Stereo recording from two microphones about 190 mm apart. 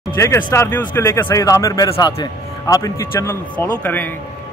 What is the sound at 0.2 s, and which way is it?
A man's voice, 15° left (ahead or behind).